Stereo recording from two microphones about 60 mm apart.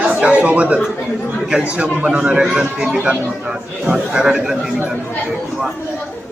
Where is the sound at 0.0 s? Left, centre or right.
Right.